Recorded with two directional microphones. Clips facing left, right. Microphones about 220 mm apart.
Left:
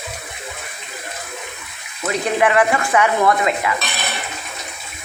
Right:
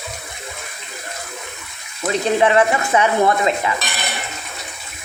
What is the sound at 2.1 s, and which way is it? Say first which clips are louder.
Dishes: right 2 dB; 25° right (ahead or behind).